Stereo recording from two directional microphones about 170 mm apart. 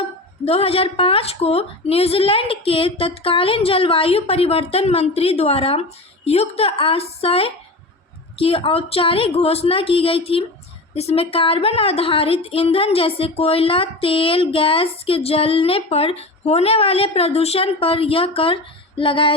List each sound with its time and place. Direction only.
0.4 s a woman's voice: 35° left (ahead or behind)